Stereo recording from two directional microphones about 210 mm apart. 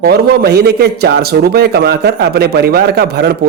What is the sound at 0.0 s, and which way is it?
A man's voice, 50° right (ahead or behind).